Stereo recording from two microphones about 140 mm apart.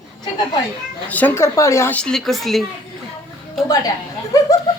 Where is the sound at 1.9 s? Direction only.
5° left (ahead or behind).